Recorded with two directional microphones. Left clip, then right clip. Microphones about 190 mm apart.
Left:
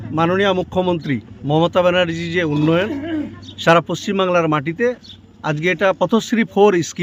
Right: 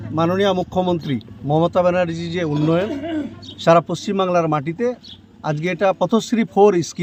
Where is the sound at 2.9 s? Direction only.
55° left (ahead or behind).